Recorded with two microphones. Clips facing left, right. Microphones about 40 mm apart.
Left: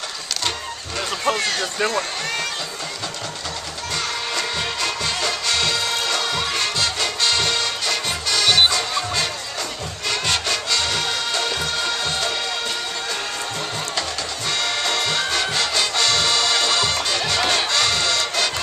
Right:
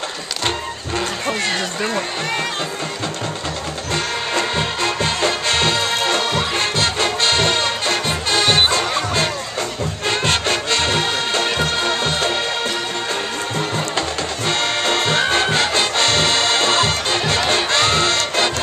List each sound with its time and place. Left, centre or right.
1.3 s speech: centre
3.9 s music: right
14.5 s music: right